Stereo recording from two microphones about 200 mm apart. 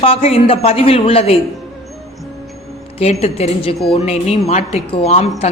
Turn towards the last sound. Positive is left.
turn(degrees=30)  # may be behind; listen again after turning